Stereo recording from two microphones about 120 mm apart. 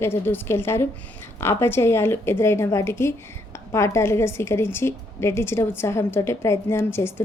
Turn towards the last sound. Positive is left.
turn(degrees=20)  # may be behind; listen again after turning